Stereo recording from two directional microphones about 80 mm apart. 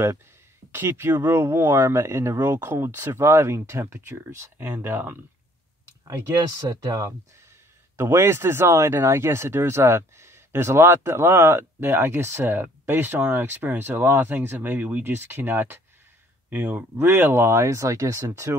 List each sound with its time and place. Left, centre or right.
0.7 s speech: right
6.0 s speech: right
7.9 s speech: right